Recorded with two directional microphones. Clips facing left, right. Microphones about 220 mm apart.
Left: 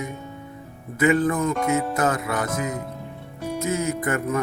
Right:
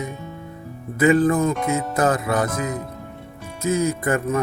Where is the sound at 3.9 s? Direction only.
35° right (ahead or behind).